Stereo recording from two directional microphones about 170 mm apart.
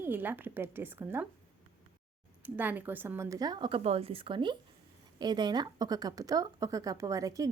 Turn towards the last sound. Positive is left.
turn(degrees=-20)  # may be behind; listen again after turning